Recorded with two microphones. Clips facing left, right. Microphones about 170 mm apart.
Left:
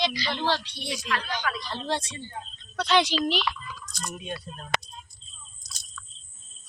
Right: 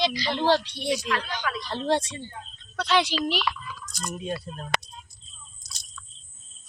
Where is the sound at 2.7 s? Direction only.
5° right (ahead or behind).